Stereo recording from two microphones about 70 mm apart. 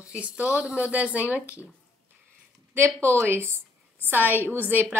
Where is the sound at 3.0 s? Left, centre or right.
Right.